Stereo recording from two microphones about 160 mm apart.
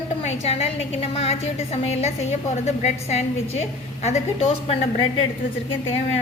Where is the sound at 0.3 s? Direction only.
40° left (ahead or behind).